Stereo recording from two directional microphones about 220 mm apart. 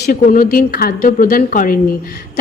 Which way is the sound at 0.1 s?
40° left (ahead or behind).